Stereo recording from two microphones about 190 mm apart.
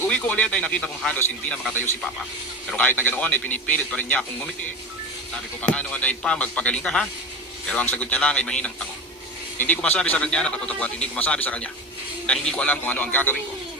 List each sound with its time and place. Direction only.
0.1 s a man's voice: 5° left (ahead or behind)
5.6 s a man's voice: 5° left (ahead or behind)
9.6 s a man's voice: 10° left (ahead or behind)